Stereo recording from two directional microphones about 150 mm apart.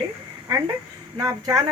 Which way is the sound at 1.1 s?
25° right (ahead or behind).